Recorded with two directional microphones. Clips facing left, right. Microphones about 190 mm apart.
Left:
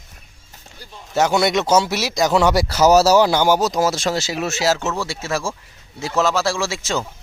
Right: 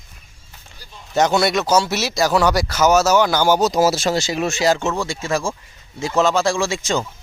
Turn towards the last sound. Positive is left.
turn(degrees=0)  # may be behind; listen again after turning